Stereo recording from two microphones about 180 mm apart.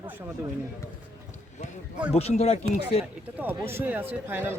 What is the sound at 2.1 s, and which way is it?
Speech, 35° left (ahead or behind).